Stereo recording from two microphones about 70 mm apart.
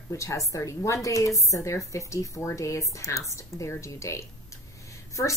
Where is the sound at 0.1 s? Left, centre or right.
Left.